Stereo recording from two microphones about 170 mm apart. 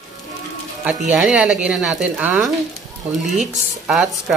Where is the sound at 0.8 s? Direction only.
5° right (ahead or behind).